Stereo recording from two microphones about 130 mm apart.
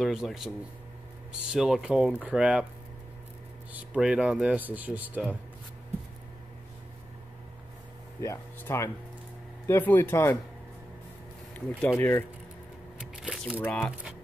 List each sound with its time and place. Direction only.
0.0 s speech: centre (ahead or behind)
1.5 s speech: 5° right (ahead or behind)
3.9 s speech: 5° right (ahead or behind)
8.2 s speech: 20° left (ahead or behind)
12.0 s speech: 20° left (ahead or behind)
13.1 s squish: 5° right (ahead or behind)
13.7 s speech: 10° left (ahead or behind)